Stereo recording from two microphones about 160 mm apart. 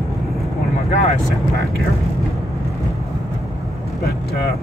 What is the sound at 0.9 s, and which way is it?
Speech, 40° left (ahead or behind).